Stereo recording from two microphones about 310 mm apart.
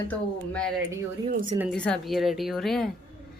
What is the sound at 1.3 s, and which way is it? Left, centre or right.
Speech, right.